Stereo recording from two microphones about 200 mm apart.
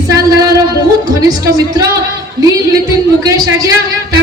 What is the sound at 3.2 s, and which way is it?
Speech, 15° right (ahead or behind).